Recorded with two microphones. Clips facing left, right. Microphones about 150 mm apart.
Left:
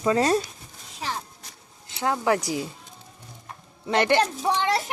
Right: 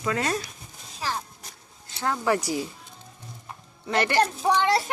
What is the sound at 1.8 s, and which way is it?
Speech, 15° left (ahead or behind).